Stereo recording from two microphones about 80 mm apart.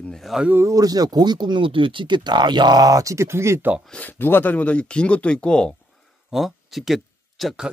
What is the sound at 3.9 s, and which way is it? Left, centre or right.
Speech, left.